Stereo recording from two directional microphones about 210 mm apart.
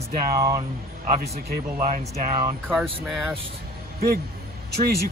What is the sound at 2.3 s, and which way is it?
Speech, 20° right (ahead or behind).